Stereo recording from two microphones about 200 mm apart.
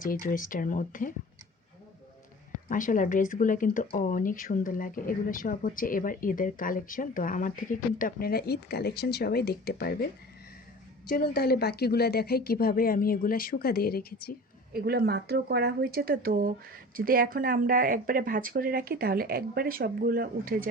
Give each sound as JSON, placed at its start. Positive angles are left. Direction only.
{"t": 0.0, "sound": "speech", "side_deg": 45}
{"t": 2.6, "sound": "speech", "side_deg": 40}
{"t": 11.1, "sound": "speech", "side_deg": 50}
{"t": 14.7, "sound": "speech", "side_deg": -50}